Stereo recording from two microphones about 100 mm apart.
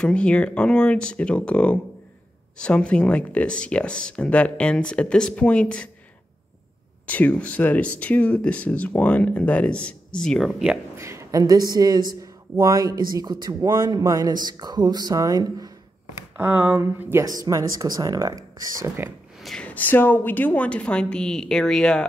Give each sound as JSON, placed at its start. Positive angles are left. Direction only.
{"t": 0.0, "sound": "speech", "side_deg": 10}
{"t": 7.1, "sound": "speech", "side_deg": 15}
{"t": 11.0, "sound": "speech", "side_deg": -30}
{"t": 16.2, "sound": "speech", "side_deg": -15}
{"t": 17.2, "sound": "speech", "side_deg": -35}
{"t": 19.4, "sound": "a sound", "side_deg": 5}
{"t": 19.7, "sound": "speech", "side_deg": 20}